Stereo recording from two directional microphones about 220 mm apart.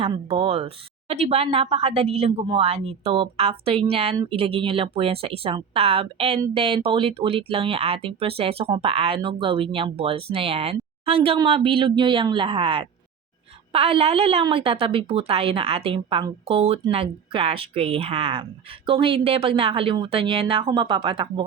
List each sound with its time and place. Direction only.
0.0 s speech: 25° right (ahead or behind)